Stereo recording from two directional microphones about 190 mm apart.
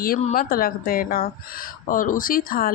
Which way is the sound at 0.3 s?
50° left (ahead or behind).